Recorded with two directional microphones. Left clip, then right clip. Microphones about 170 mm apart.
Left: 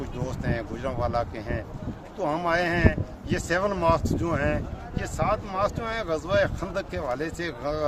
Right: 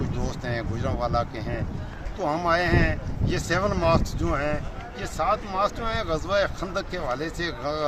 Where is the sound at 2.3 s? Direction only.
25° left (ahead or behind).